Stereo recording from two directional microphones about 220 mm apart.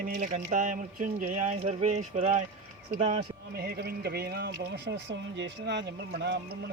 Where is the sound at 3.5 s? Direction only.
45° right (ahead or behind).